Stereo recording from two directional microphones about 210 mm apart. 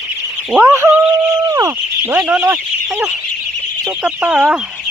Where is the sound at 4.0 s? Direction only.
5° right (ahead or behind).